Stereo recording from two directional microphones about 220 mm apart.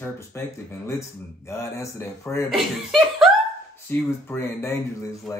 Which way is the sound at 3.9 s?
10° left (ahead or behind).